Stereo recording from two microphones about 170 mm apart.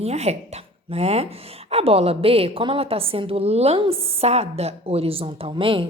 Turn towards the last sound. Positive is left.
turn(degrees=-30)  # may be behind; listen again after turning